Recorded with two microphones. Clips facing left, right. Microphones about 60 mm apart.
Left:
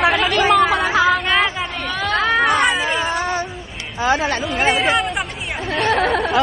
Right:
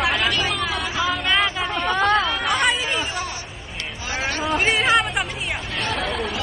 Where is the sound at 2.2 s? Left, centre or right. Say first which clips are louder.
Left 6 dB; left.